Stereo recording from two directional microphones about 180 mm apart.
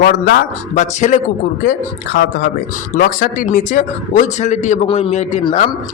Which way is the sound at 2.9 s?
50° left (ahead or behind).